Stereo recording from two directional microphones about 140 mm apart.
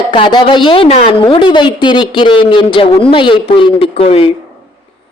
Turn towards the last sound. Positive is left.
turn(degrees=45)  # may be behind; listen again after turning